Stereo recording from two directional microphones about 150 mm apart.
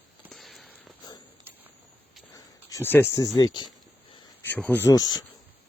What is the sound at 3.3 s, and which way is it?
Speech, 30° left (ahead or behind).